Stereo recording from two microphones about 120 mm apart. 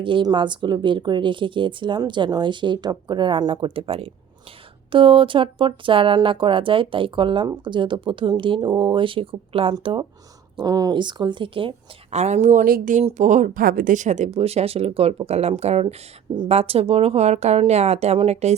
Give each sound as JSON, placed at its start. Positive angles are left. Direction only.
{"t": 0.0, "sound": "speech", "side_deg": -40}
{"t": 10.6, "sound": "speech", "side_deg": -30}
{"t": 12.1, "sound": "speech", "side_deg": -70}